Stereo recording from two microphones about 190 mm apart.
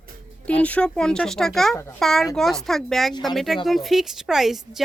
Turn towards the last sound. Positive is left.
turn(degrees=0)  # may be behind; listen again after turning